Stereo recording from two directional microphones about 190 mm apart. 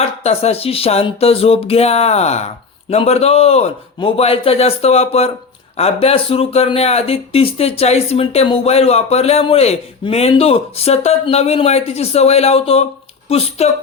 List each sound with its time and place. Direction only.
0.2 s speech: 35° left (ahead or behind)